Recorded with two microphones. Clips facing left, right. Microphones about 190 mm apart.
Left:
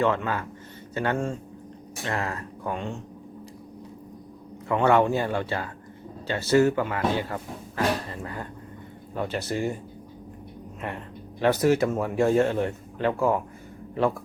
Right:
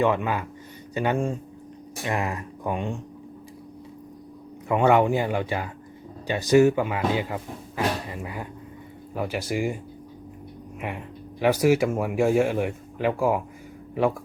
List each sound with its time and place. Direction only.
0.0 s speech: 15° right (ahead or behind)
4.7 s speech: 15° right (ahead or behind)
10.8 s speech: 10° right (ahead or behind)